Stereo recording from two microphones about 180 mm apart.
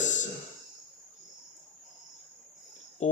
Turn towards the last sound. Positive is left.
turn(degrees=40)  # may be behind; listen again after turning